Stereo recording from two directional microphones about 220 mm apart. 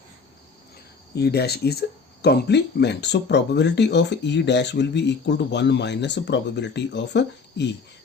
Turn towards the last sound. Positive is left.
turn(degrees=50)  # may be behind; listen again after turning